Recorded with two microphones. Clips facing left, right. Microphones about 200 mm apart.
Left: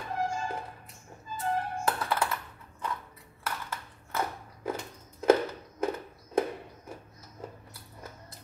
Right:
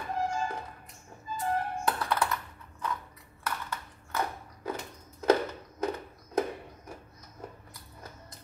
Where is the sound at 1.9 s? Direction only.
5° left (ahead or behind).